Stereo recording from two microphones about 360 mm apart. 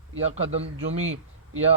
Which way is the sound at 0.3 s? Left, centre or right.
Centre.